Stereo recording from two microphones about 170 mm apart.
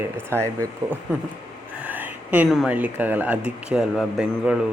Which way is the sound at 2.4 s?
Centre (ahead or behind).